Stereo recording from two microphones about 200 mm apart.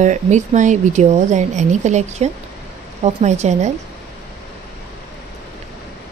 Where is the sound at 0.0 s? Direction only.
35° right (ahead or behind).